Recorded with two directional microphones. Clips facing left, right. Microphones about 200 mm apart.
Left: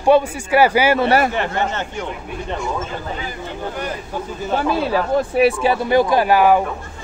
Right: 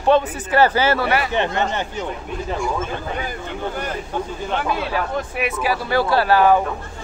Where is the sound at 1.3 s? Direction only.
20° right (ahead or behind).